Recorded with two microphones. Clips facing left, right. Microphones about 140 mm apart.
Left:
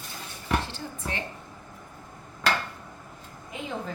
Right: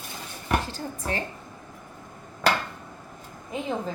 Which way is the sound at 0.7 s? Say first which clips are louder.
Right 4 dB; 40° right (ahead or behind).